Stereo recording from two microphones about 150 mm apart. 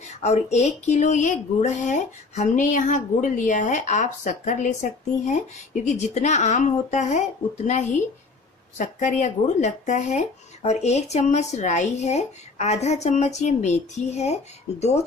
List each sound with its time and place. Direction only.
0.0 s speech: 50° left (ahead or behind)